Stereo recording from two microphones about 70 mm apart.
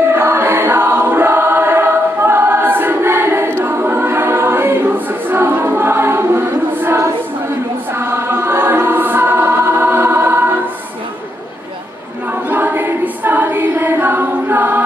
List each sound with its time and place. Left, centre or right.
0.0 s choir: right
12.4 s choir: right